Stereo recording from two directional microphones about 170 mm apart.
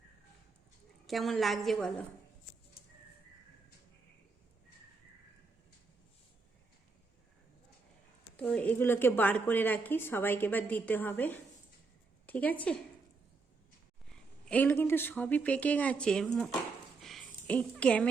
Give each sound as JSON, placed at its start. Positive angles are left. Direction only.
{"t": 1.0, "sound": "a woman's voice", "side_deg": 0}
{"t": 8.4, "sound": "a woman's voice", "side_deg": 5}
{"t": 14.1, "sound": "a woman's voice", "side_deg": 5}
{"t": 17.0, "sound": "a sound", "side_deg": 0}